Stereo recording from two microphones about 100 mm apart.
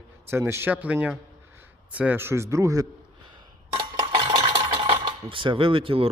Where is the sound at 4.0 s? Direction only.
50° right (ahead or behind).